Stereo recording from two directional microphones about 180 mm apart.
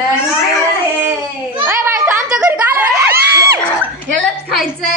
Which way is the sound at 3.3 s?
15° right (ahead or behind).